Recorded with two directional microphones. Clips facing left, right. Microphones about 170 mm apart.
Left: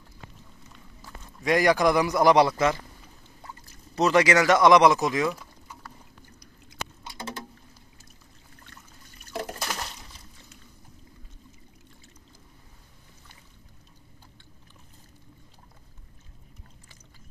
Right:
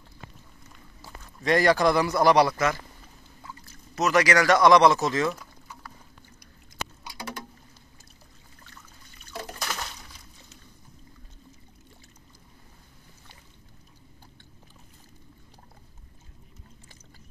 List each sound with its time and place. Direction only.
1.2 s a man's voice: 10° left (ahead or behind)
3.9 s speech: 25° left (ahead or behind)
5.3 s a sound: centre (ahead or behind)
7.1 s patter: 25° left (ahead or behind)